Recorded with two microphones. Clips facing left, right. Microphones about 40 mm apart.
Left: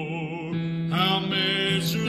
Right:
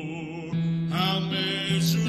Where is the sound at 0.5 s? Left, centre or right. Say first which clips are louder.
Left 1 dB; left.